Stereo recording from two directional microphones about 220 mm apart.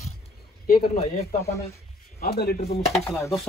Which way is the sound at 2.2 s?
45° left (ahead or behind).